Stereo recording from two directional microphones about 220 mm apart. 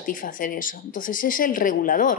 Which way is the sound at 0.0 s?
40° left (ahead or behind).